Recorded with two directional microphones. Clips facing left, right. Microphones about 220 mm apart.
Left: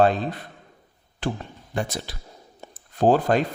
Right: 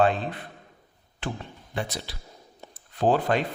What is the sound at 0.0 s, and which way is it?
A man's voice, 40° left (ahead or behind).